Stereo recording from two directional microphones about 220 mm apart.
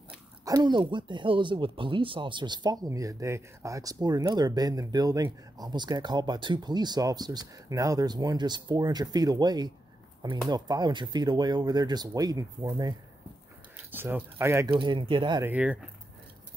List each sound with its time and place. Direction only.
0.5 s speech: 20° right (ahead or behind)
13.9 s speech: 10° right (ahead or behind)
15.4 s speech: 5° right (ahead or behind)